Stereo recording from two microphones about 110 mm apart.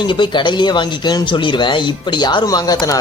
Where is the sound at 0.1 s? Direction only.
45° left (ahead or behind).